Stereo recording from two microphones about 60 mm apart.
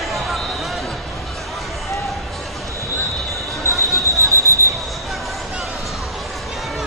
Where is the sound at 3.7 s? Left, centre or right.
Left.